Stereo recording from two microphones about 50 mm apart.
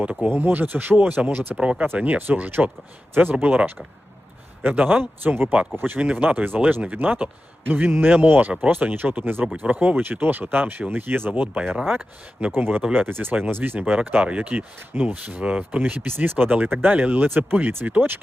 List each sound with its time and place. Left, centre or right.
0.0 s speech: right
0.3 s speech: right
6.0 s speech: right
13.7 s speech: right
16.0 s speech: right